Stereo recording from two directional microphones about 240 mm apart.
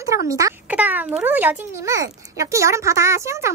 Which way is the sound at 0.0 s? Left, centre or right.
Centre.